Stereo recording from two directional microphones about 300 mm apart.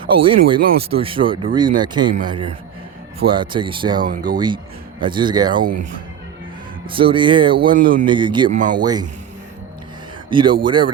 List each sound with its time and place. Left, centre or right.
0.1 s speech: centre
6.9 s speech: centre
7.7 s speech: right
8.0 s speech: centre
8.4 s speech: right
8.7 s speech: centre
10.2 s speech: centre